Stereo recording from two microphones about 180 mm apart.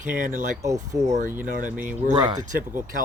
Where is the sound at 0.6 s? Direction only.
20° right (ahead or behind).